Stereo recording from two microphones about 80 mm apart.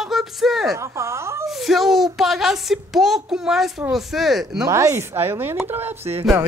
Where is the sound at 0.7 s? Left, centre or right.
Right.